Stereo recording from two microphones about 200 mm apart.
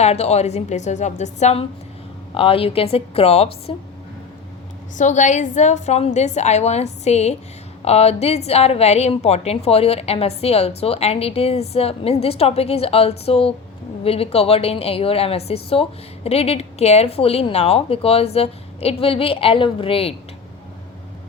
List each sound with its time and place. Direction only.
0.0 s a woman's voice: 30° left (ahead or behind)
4.9 s a woman's voice: 35° left (ahead or behind)